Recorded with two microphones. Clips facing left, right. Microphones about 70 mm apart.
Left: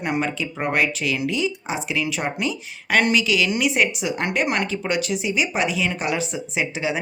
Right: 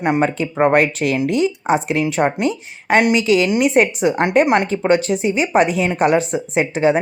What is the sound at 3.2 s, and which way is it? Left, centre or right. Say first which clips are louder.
Speech: right 6 dB; right.